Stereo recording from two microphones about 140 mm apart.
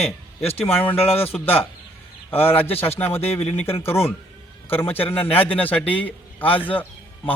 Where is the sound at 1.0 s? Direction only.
45° left (ahead or behind).